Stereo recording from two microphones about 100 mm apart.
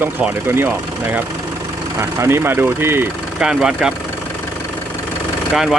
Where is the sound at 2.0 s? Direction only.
25° right (ahead or behind).